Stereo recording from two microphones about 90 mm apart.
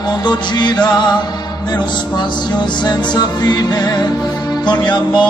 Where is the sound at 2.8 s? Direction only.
45° left (ahead or behind).